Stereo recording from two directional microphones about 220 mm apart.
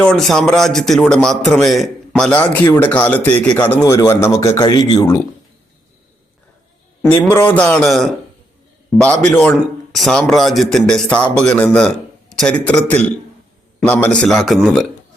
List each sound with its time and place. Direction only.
0.0 s a man's voice: centre (ahead or behind)
7.0 s a man's voice: 10° left (ahead or behind)